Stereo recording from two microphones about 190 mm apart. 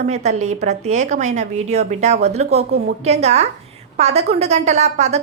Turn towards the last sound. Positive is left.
turn(degrees=-35)  # may be behind; listen again after turning